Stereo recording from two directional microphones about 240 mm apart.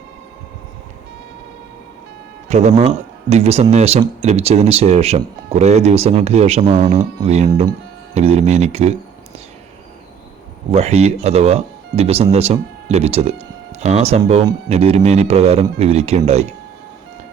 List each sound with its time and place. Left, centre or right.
2.5 s speech: right
10.7 s speech: right